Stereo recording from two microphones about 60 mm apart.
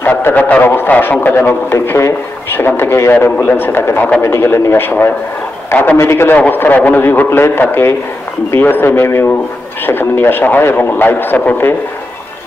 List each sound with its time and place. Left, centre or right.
0.0 s speech: left
1.7 s a man's voice: left
5.9 s speech: left
6.3 s speech: left